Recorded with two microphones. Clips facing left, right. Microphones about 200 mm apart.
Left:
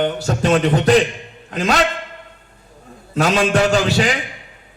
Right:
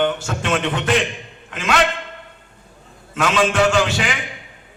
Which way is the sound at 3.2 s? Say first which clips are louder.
Left 2 dB; 35° left (ahead or behind).